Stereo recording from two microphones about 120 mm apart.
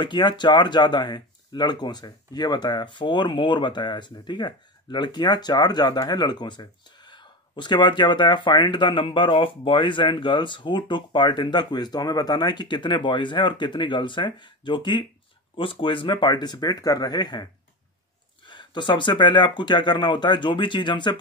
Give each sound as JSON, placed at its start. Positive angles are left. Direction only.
{"t": 0.0, "sound": "speech", "side_deg": 40}